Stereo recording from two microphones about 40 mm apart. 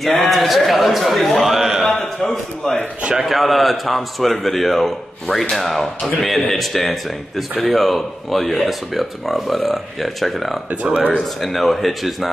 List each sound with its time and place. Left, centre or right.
0.0 s a man's voice: centre
1.6 s a sound: centre
1.9 s a sound: centre
3.3 s speech: centre
10.7 s speech: right
11.4 s speech: centre